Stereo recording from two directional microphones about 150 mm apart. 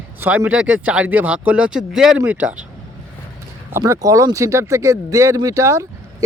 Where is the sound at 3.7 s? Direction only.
15° right (ahead or behind).